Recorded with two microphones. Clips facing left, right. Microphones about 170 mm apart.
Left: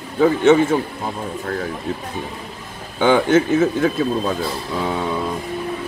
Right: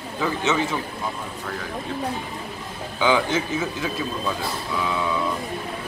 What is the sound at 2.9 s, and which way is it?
A man's voice, 50° left (ahead or behind).